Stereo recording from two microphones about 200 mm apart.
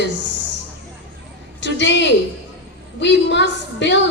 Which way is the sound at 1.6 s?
60° left (ahead or behind).